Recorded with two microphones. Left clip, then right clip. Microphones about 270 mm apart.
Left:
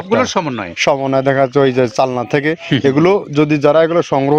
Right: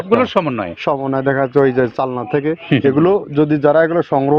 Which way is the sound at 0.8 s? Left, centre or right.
Left.